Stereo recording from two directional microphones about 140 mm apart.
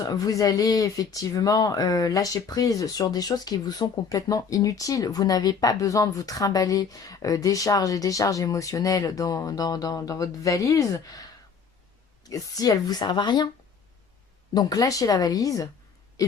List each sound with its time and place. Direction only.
0.0 s speech: 25° left (ahead or behind)
12.2 s speech: 25° left (ahead or behind)
14.5 s speech: 25° left (ahead or behind)